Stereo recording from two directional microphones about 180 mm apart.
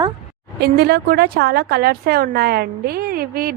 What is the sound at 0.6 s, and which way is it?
A woman's voice, 60° right (ahead or behind).